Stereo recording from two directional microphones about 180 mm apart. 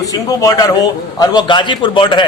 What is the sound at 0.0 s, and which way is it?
A man's voice, 20° left (ahead or behind).